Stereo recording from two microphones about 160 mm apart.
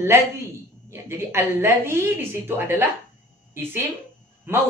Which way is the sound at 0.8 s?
15° right (ahead or behind).